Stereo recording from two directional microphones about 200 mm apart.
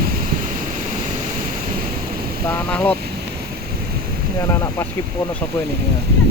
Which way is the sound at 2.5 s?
5° left (ahead or behind).